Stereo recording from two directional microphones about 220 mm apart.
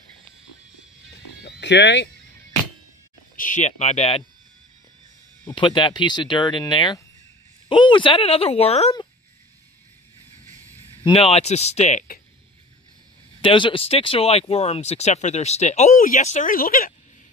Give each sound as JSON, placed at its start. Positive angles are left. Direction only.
{"t": 1.4, "sound": "music", "side_deg": 50}
{"t": 3.3, "sound": "speech", "side_deg": 35}
{"t": 5.4, "sound": "speech", "side_deg": 20}
{"t": 11.1, "sound": "speech", "side_deg": 25}
{"t": 13.4, "sound": "speech", "side_deg": 25}